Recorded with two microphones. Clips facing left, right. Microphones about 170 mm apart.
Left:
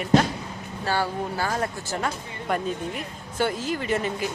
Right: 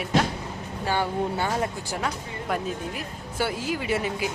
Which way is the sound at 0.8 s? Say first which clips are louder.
Right 1 dB; 20° right (ahead or behind).